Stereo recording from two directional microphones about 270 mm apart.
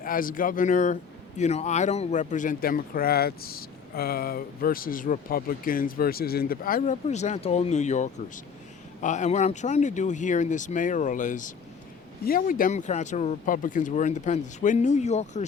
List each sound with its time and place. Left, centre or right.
0.0 s speech: left